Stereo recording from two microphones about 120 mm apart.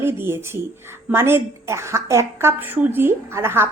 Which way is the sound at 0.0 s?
20° right (ahead or behind).